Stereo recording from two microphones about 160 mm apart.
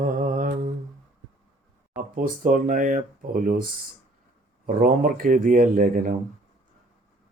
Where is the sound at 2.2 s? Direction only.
55° right (ahead or behind).